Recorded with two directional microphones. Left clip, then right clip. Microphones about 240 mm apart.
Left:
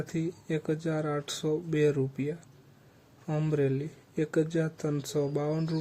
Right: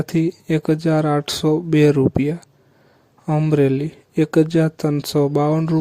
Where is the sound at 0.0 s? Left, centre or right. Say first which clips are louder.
Right 14 dB; right.